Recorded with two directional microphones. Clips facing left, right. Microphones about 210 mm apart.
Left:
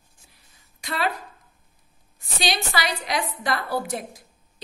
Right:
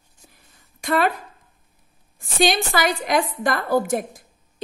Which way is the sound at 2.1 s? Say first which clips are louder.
Right 7 dB; 50° right (ahead or behind).